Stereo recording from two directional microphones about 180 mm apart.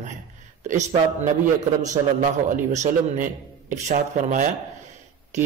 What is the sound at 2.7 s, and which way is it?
A man's voice, 45° right (ahead or behind).